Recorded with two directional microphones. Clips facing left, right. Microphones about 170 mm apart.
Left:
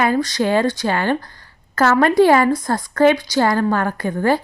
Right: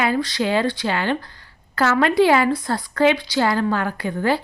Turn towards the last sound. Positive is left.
turn(degrees=45)  # may be behind; listen again after turning